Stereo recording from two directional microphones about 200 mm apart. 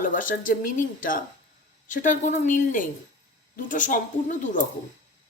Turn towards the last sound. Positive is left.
turn(degrees=40)  # may be behind; listen again after turning